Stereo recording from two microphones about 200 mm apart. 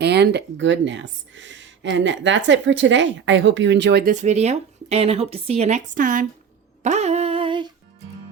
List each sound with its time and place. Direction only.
0.0 s speech: 55° right (ahead or behind)
4.1 s speech: 35° right (ahead or behind)
6.8 s a sound: 35° right (ahead or behind)